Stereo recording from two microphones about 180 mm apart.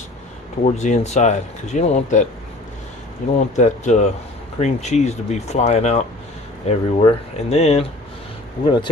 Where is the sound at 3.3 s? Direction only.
40° left (ahead or behind).